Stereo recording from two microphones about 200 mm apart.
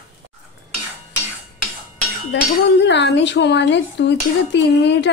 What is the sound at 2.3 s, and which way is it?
Speech, 65° left (ahead or behind).